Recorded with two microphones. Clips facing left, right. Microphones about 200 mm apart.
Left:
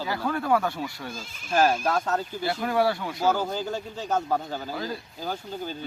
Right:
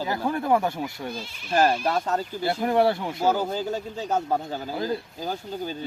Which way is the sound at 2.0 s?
15° right (ahead or behind).